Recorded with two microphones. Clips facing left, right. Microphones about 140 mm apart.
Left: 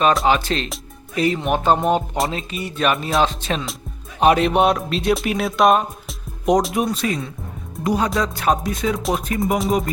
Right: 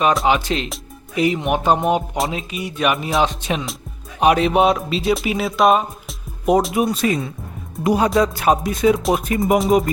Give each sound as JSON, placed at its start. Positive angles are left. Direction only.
{"t": 0.3, "sound": "speech", "side_deg": -15}
{"t": 4.2, "sound": "speech", "side_deg": -5}